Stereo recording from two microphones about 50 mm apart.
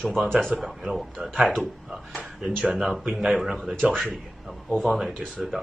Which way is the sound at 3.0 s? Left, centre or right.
Right.